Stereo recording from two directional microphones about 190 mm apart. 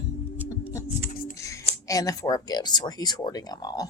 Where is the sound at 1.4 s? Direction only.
15° left (ahead or behind).